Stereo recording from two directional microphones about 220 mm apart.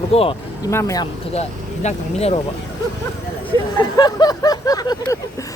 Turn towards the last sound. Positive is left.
turn(degrees=15)  # may be behind; listen again after turning